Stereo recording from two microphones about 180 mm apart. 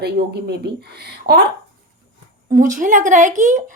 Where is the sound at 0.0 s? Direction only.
65° right (ahead or behind).